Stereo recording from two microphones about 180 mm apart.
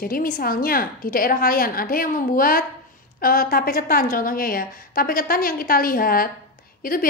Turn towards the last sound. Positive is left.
turn(degrees=50)  # may be behind; listen again after turning